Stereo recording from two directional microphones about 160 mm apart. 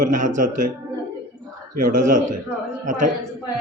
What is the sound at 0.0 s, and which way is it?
Speech, 55° right (ahead or behind).